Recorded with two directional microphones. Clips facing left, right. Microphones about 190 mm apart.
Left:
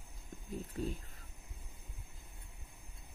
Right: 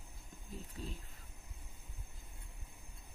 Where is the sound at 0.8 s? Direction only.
50° left (ahead or behind).